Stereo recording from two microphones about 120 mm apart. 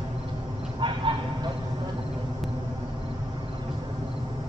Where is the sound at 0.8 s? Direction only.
45° right (ahead or behind).